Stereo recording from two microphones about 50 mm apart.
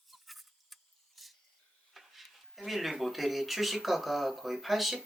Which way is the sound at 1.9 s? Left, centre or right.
Centre.